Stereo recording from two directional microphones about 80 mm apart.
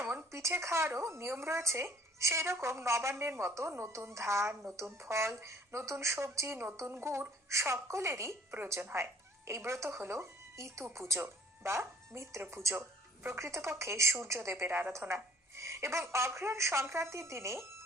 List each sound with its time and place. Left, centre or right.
0.0 s speech: right